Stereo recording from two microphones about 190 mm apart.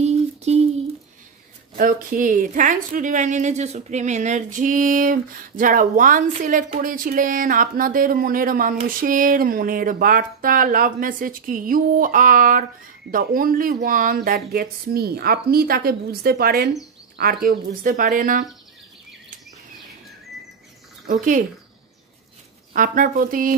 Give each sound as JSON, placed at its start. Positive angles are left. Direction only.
{"t": 0.0, "sound": "a sound", "side_deg": -35}
{"t": 1.8, "sound": "speech", "side_deg": -45}
{"t": 21.1, "sound": "speech", "side_deg": -45}
{"t": 22.7, "sound": "speech", "side_deg": -45}